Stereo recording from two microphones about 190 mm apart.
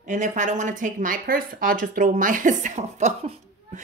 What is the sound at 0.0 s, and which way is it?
Speech, 40° right (ahead or behind).